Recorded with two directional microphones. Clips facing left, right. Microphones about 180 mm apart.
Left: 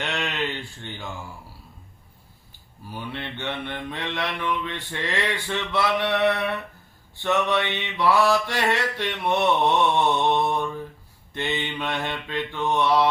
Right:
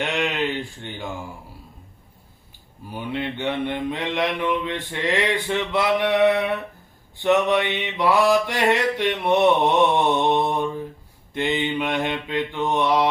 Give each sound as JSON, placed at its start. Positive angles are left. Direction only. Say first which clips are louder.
{"t": 0.0, "sound": "speech", "louder": "right 4 dB", "side_deg": -20}
{"t": 2.9, "sound": "mantra", "louder": "right 6 dB", "side_deg": -15}